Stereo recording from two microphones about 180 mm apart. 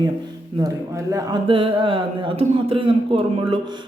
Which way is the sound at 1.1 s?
25° right (ahead or behind).